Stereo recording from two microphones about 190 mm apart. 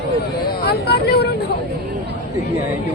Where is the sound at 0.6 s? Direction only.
55° left (ahead or behind).